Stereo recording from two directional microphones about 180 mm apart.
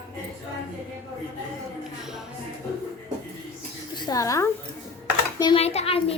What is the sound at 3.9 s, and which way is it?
Speech, 20° left (ahead or behind).